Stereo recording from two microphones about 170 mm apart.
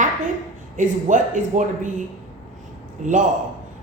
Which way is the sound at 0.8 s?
45° right (ahead or behind).